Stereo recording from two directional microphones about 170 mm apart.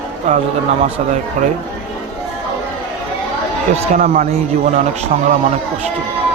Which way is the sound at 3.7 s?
50° right (ahead or behind).